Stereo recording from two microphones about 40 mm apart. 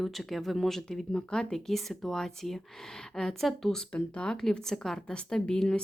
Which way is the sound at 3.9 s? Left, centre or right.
Left.